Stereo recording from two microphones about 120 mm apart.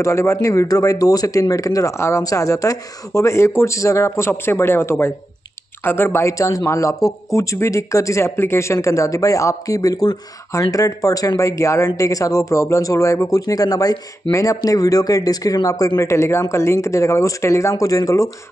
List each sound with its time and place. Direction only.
0.0 s speech: 25° left (ahead or behind)